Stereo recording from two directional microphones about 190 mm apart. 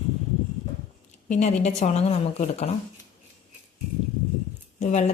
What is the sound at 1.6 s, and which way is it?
A woman's voice, 35° left (ahead or behind).